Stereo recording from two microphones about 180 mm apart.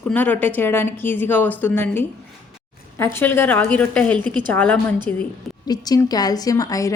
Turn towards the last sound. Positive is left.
turn(degrees=20)  # may be behind; listen again after turning